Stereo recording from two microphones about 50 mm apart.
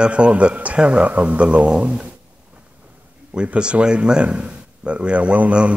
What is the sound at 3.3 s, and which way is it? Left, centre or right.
A man's voice, centre.